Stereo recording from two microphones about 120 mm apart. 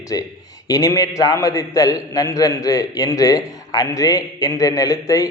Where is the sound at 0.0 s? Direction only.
30° left (ahead or behind).